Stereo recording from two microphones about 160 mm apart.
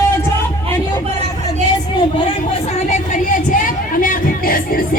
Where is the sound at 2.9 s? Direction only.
55° left (ahead or behind).